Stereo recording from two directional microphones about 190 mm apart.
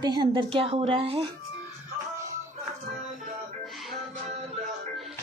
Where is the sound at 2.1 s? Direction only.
15° right (ahead or behind).